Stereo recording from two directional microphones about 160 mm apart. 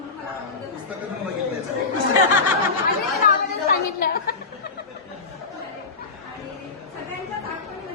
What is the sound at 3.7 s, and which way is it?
Chatter, 70° left (ahead or behind).